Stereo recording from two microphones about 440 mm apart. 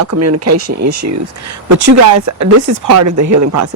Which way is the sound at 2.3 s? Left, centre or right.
Right.